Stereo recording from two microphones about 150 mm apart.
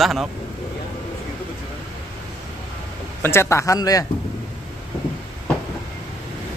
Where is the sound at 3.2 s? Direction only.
15° left (ahead or behind).